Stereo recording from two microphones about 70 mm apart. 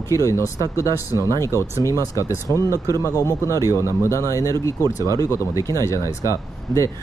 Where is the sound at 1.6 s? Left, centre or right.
Left.